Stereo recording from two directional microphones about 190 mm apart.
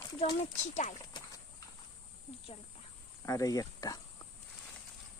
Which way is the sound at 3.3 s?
20° left (ahead or behind).